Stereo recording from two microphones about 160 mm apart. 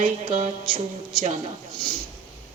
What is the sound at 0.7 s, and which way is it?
Speech, 35° right (ahead or behind).